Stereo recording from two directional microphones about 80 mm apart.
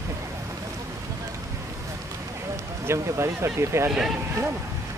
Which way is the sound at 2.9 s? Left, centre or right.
Right.